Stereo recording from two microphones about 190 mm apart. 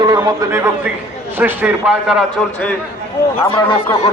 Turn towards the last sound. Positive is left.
turn(degrees=25)  # may be behind; listen again after turning